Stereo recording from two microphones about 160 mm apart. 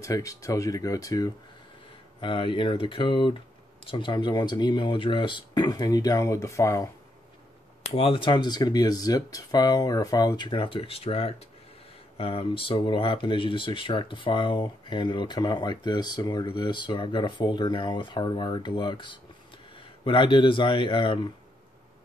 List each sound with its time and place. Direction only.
0.0 s speech: 20° left (ahead or behind)
7.9 s speech: 35° left (ahead or behind)